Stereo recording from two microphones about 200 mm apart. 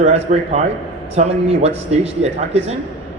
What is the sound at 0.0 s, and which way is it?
A man's voice, 35° right (ahead or behind).